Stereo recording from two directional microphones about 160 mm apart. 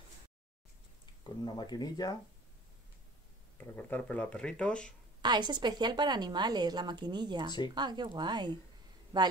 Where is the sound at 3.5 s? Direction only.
10° left (ahead or behind).